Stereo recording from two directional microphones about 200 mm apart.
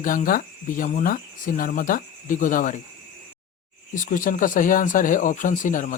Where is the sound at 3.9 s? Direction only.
40° left (ahead or behind).